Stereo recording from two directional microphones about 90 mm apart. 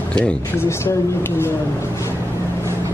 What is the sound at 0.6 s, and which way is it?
Speech, 30° left (ahead or behind).